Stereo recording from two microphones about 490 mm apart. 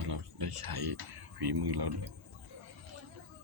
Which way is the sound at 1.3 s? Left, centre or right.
Right.